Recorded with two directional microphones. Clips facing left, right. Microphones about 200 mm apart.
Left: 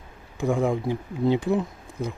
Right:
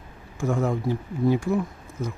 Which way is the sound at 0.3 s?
15° left (ahead or behind).